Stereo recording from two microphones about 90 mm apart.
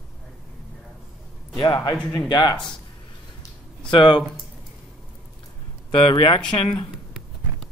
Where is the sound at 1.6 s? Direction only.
65° left (ahead or behind).